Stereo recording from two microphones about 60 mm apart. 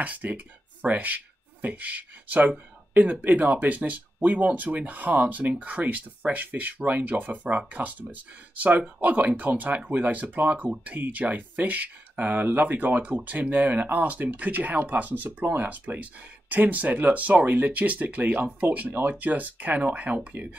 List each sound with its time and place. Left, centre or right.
0.0 s speech: right